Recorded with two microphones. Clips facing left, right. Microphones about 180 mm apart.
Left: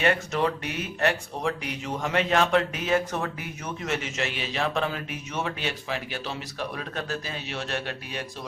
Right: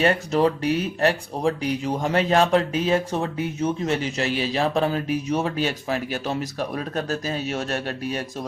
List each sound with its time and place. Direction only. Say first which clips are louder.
0.0 s speech: right 5 dB; 35° right (ahead or behind)